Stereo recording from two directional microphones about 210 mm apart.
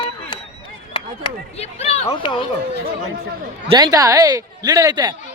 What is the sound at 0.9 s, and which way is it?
Speech, 25° left (ahead or behind).